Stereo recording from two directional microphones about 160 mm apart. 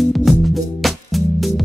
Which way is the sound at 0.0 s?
Centre (ahead or behind).